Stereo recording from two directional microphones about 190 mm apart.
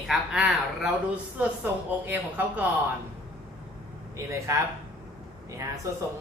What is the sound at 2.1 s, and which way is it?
Speech, 10° right (ahead or behind).